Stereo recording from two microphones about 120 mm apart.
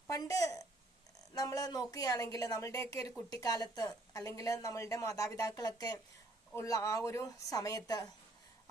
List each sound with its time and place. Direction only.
0.1 s a woman's voice: 30° left (ahead or behind)